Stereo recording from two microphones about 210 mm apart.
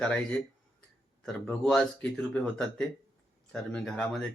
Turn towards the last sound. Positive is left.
turn(degrees=5)  # may be behind; listen again after turning